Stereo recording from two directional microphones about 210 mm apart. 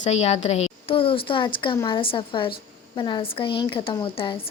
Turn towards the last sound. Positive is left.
turn(degrees=25)  # may be behind; listen again after turning